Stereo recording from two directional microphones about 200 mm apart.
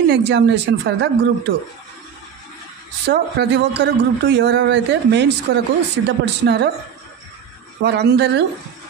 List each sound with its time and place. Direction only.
0.1 s a man's voice: 60° right (ahead or behind)
3.1 s a man's voice: 55° right (ahead or behind)
7.8 s a man's voice: 55° right (ahead or behind)